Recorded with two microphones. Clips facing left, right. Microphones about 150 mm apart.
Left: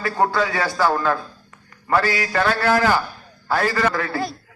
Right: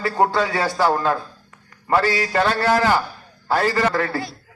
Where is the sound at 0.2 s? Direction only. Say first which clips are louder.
Right 1 dB; 25° right (ahead or behind).